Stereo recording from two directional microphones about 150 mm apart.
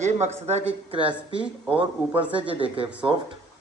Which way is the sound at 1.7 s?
35° right (ahead or behind).